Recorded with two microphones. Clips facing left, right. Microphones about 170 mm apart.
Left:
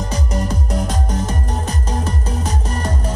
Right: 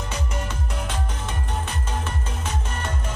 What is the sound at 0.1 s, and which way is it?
Music, 40° left (ahead or behind).